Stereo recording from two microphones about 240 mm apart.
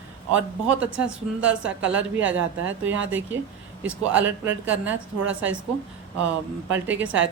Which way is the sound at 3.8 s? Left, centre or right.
Centre.